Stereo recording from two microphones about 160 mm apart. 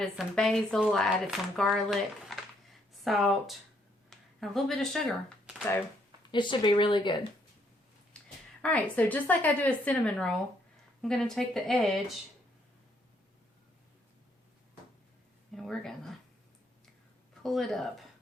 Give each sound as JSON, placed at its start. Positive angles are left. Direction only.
{"t": 0.0, "sound": "speech", "side_deg": 5}
{"t": 6.3, "sound": "speech", "side_deg": 30}
{"t": 8.1, "sound": "a sound", "side_deg": 5}
{"t": 8.6, "sound": "a woman's voice", "side_deg": 10}
{"t": 15.5, "sound": "speech", "side_deg": 0}
{"t": 17.4, "sound": "speech", "side_deg": 0}